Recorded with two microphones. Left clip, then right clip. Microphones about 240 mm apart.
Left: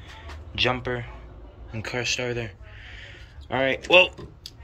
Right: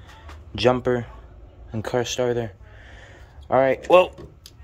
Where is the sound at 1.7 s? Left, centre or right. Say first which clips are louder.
Right 3 dB; right.